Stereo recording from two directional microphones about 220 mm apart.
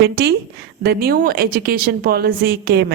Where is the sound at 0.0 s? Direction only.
45° right (ahead or behind).